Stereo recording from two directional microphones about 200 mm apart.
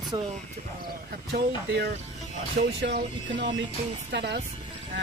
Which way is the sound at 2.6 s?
60° right (ahead or behind).